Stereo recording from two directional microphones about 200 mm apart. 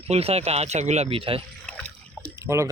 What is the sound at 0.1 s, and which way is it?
Speech, 30° right (ahead or behind).